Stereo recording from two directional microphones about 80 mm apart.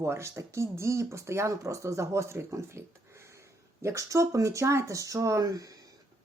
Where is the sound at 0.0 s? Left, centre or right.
Right.